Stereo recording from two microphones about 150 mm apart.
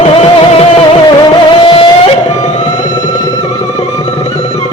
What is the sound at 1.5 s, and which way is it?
Music, 35° left (ahead or behind).